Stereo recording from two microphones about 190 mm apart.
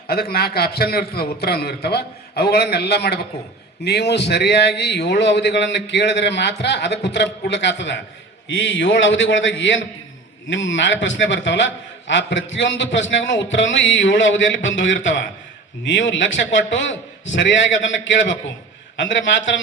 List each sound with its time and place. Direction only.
0.1 s a man's voice: 55° left (ahead or behind); by 19.5 s 75° left (ahead or behind)